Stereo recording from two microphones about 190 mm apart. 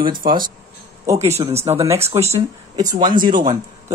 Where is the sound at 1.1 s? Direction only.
35° right (ahead or behind).